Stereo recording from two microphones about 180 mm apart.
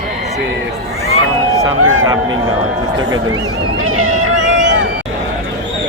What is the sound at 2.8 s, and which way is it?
Speech, 25° right (ahead or behind).